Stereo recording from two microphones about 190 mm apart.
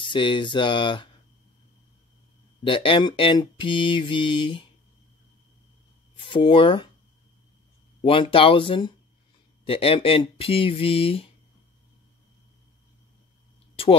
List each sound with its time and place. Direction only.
0.0 s mantra: 25° left (ahead or behind)
2.6 s mantra: 25° left (ahead or behind)
6.3 s mantra: 25° left (ahead or behind)
8.0 s mantra: 30° left (ahead or behind)